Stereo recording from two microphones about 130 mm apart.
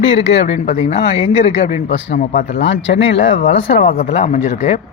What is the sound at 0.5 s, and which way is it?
Speech, 70° left (ahead or behind).